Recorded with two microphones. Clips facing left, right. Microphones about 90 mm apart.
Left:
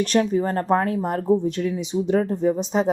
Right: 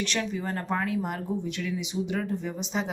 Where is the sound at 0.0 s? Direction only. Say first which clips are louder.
Left 10 dB; 40° left (ahead or behind).